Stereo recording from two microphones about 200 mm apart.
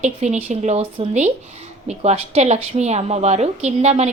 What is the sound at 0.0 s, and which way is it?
A woman's voice, 35° right (ahead or behind).